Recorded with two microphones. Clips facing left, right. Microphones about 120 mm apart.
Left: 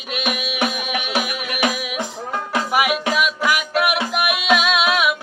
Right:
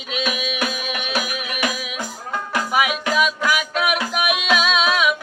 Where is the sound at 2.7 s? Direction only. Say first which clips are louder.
Left 1 dB; 5° left (ahead or behind).